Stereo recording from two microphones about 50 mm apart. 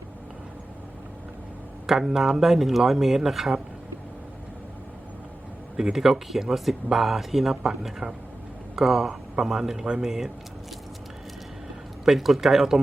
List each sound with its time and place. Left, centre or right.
1.9 s speech: centre
5.7 s speech: centre
12.0 s speech: centre